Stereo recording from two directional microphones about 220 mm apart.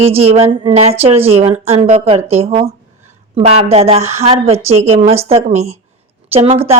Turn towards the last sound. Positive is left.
turn(degrees=-25)  # may be behind; listen again after turning